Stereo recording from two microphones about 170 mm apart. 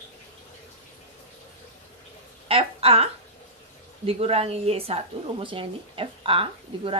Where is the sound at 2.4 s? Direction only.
35° right (ahead or behind).